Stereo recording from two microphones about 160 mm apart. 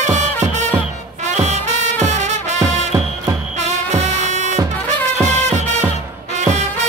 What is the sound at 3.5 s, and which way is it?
Music, 45° right (ahead or behind).